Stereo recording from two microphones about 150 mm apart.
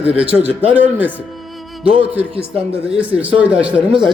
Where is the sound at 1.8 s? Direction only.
35° right (ahead or behind).